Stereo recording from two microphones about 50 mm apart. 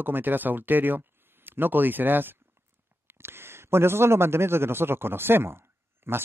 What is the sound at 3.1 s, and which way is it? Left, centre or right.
A man's voice, right.